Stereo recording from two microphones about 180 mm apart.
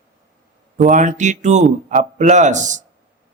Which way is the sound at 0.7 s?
45° right (ahead or behind).